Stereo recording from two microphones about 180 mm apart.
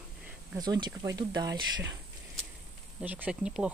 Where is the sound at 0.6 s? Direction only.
25° right (ahead or behind).